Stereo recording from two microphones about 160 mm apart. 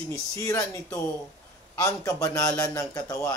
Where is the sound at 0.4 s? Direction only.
20° left (ahead or behind).